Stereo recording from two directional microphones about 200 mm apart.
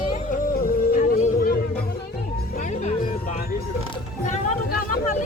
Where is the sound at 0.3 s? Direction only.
45° left (ahead or behind).